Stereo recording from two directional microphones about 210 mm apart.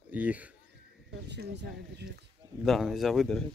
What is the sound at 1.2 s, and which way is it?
Speech, 55° right (ahead or behind).